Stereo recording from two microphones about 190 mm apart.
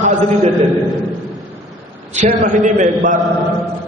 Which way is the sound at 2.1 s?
40° right (ahead or behind).